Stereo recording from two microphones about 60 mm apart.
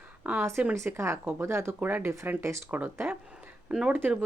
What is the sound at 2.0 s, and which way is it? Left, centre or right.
Speech, right.